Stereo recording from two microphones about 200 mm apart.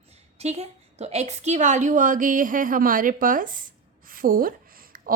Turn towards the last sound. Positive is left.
turn(degrees=-45)  # may be behind; listen again after turning